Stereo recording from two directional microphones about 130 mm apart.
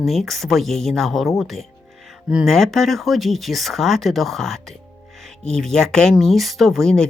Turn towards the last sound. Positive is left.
turn(degrees=5)  # may be behind; listen again after turning